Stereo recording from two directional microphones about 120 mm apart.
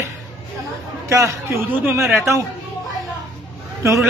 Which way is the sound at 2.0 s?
Centre (ahead or behind).